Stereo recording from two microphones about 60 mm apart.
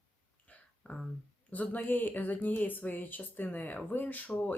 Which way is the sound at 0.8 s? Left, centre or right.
Left.